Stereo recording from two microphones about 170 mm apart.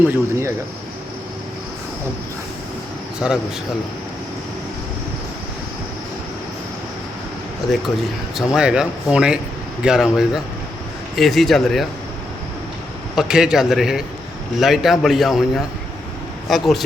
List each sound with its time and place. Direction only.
0.1 s speech: 15° right (ahead or behind)
3.2 s speech: centre (ahead or behind)
8.4 s speech: 5° right (ahead or behind)
13.1 s speech: 5° right (ahead or behind)